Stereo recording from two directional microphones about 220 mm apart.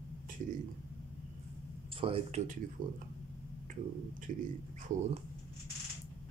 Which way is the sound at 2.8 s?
40° right (ahead or behind).